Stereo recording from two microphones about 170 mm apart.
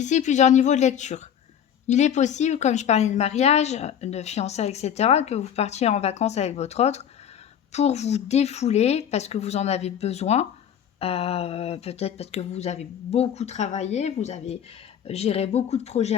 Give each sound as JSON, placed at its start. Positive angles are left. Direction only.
{"t": 0.0, "sound": "a woman's voice", "side_deg": 45}